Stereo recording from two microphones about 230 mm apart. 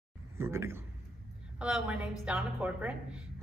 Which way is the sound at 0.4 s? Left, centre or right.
Centre.